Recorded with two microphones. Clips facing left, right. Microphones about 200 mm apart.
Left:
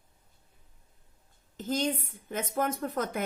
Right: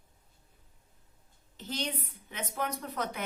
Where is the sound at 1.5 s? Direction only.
45° left (ahead or behind).